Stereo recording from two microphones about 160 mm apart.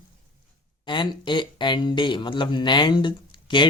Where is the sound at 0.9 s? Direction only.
30° left (ahead or behind).